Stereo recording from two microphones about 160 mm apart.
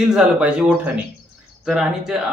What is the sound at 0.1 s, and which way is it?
Speech, 5° right (ahead or behind).